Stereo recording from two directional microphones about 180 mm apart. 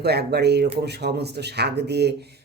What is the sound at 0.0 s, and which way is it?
Speech, 65° right (ahead or behind).